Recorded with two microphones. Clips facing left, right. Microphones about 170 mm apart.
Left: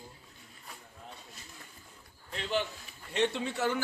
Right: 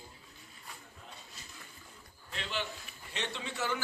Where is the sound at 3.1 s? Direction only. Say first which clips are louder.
Left 9 dB; 55° left (ahead or behind).